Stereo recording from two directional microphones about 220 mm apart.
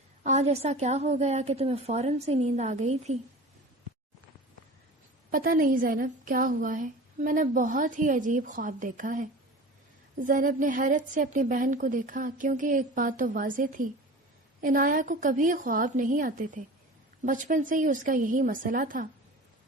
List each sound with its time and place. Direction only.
0.2 s a woman's voice: 30° right (ahead or behind)
5.3 s a woman's voice: 40° right (ahead or behind)